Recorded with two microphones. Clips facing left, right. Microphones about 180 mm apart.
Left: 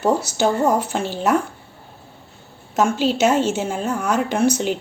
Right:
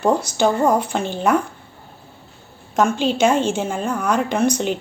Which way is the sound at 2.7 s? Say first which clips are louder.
Even; 5° left (ahead or behind).